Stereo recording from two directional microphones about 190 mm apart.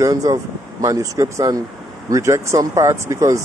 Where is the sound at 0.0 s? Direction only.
15° right (ahead or behind).